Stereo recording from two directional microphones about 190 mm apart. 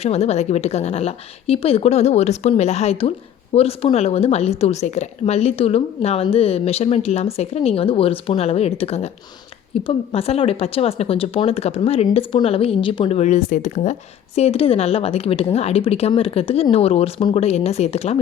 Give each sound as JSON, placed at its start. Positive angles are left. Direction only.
{"t": 0.0, "sound": "speech", "side_deg": 35}